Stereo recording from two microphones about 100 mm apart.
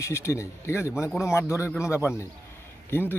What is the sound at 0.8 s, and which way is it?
Speech, 10° right (ahead or behind).